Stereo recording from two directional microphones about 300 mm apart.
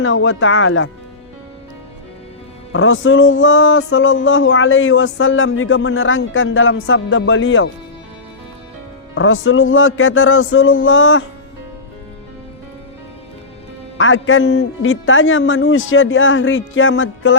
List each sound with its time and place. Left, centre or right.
0.0 s speech: left
2.7 s speech: left
9.1 s speech: left
14.0 s speech: left